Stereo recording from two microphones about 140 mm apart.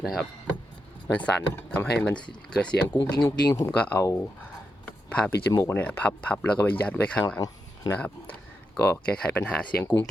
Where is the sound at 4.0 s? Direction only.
20° left (ahead or behind).